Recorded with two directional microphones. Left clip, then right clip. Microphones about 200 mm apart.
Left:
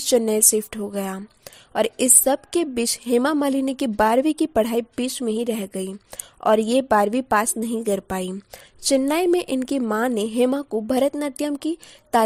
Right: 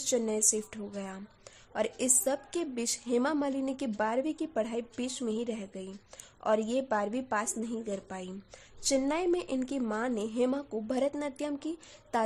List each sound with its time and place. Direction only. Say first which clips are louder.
0.0 s a woman's voice: left 11 dB; 40° left (ahead or behind)
8.8 s a woman's voice: left 10 dB; 40° left (ahead or behind)